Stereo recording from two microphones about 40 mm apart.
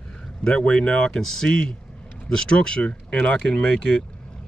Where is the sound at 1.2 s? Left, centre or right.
Centre; by 3.4 s left.